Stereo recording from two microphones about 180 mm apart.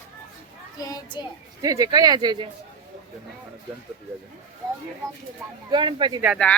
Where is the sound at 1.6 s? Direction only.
20° right (ahead or behind).